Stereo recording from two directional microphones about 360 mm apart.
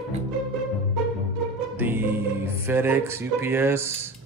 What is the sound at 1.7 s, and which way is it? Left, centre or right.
Speech, centre.